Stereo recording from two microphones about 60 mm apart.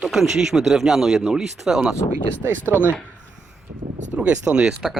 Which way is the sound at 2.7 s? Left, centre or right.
Right.